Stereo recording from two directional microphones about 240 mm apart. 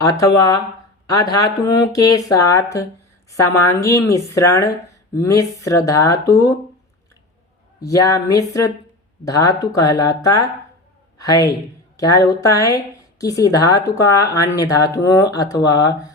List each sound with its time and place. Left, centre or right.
0.0 s a woman's voice: centre
7.8 s a woman's voice: centre